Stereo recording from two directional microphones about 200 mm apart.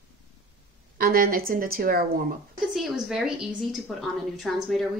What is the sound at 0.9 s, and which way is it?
A woman's voice, 45° right (ahead or behind).